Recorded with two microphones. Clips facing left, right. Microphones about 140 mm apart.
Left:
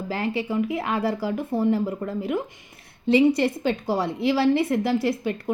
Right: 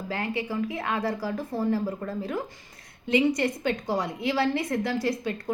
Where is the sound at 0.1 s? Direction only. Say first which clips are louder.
Left 4 dB; 25° left (ahead or behind).